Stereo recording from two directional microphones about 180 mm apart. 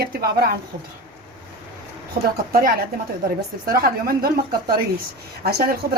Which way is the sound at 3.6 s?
55° right (ahead or behind).